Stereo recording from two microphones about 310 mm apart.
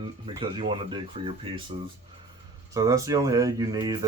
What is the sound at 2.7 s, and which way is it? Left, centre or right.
Speech, centre.